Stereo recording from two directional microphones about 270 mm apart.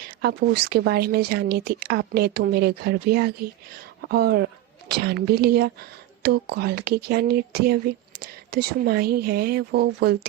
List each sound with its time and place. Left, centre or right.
0.2 s speech: right